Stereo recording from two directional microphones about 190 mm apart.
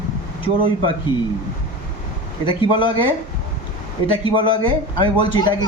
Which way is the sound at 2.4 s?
25° left (ahead or behind).